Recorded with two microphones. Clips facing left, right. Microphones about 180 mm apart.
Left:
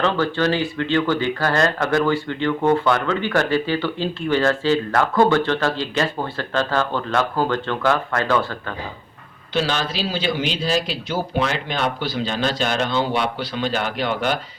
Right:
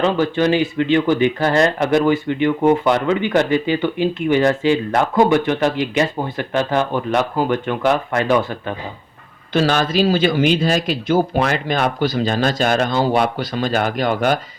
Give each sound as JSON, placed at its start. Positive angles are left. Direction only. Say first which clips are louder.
{"t": 0.0, "sound": "speech", "louder": "right 3 dB", "side_deg": -15}
{"t": 9.5, "sound": "a man's voice", "louder": "right 5 dB", "side_deg": -45}